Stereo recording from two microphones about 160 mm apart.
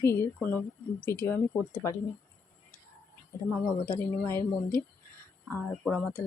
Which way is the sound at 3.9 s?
15° left (ahead or behind).